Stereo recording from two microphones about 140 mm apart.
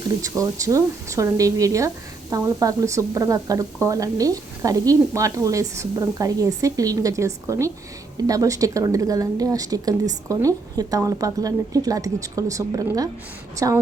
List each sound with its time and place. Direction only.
0.2 s a woman's voice: 25° right (ahead or behind)